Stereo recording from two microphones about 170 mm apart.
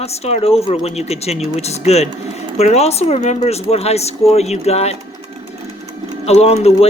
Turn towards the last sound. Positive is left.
turn(degrees=35)  # may be behind; listen again after turning